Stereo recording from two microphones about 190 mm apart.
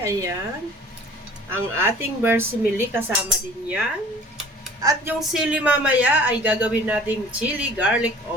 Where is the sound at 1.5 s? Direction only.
10° right (ahead or behind).